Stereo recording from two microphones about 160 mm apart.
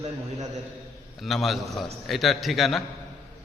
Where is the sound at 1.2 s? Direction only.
Centre (ahead or behind).